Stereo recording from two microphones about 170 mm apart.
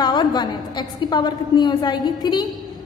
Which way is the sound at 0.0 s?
25° left (ahead or behind).